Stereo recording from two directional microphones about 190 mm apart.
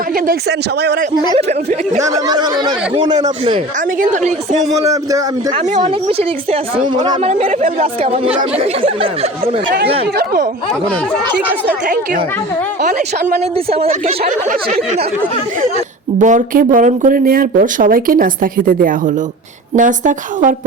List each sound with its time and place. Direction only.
2.2 s a woman's voice: 20° right (ahead or behind)
4.0 s speech: 40° right (ahead or behind)
5.8 s a woman's voice: 30° right (ahead or behind)
16.2 s speech: 40° right (ahead or behind)